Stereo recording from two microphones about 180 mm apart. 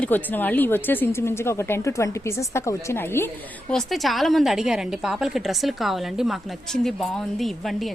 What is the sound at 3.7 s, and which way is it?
A woman's voice, centre (ahead or behind).